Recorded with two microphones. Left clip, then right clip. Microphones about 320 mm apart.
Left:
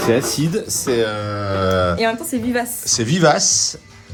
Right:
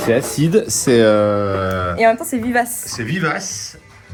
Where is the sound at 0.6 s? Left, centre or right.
Right.